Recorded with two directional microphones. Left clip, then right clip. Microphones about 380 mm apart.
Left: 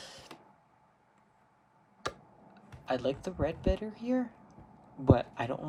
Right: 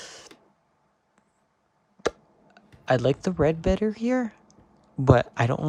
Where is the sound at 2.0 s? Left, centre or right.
Centre.